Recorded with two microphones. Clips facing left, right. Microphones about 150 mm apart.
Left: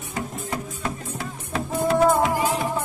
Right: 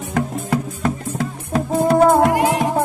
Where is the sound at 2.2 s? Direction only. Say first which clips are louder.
Right 6 dB; 65° right (ahead or behind).